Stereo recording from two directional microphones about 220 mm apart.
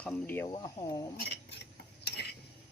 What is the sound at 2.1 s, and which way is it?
Mechanisms, 50° left (ahead or behind).